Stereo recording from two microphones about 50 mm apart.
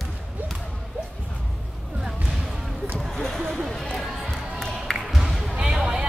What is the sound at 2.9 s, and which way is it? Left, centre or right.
Basketball bounce, centre.